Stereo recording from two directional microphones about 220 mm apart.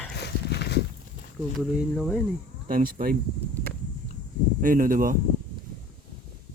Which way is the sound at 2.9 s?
40° right (ahead or behind).